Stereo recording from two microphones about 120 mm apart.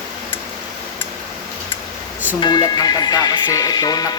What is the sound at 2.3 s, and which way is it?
Speech, 35° left (ahead or behind).